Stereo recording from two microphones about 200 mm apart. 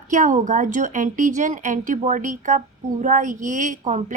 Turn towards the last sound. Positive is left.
turn(degrees=-40)  # may be behind; listen again after turning